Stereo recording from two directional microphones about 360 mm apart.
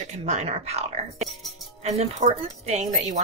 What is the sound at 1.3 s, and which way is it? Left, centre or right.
Speech, centre.